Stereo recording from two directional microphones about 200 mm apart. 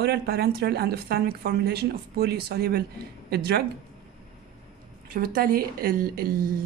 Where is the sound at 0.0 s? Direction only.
55° right (ahead or behind).